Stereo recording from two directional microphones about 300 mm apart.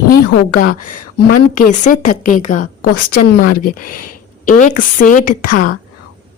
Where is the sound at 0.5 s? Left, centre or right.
Left.